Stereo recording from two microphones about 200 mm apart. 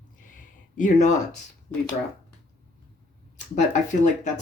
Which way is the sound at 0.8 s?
35° left (ahead or behind).